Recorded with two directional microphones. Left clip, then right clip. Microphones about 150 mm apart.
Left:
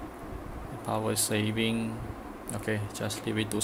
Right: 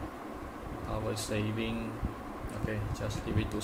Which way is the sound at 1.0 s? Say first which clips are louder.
Left 3 dB; 50° left (ahead or behind).